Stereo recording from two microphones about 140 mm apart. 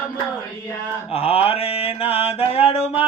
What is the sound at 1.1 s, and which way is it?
Mantra, 45° left (ahead or behind).